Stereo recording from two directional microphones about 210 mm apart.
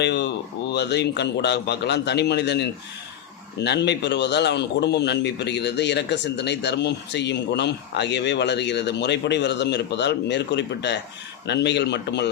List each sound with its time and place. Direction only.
0.0 s a man's voice: 55° left (ahead or behind)